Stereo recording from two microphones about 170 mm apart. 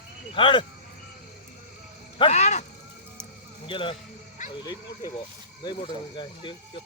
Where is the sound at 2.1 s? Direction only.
40° left (ahead or behind).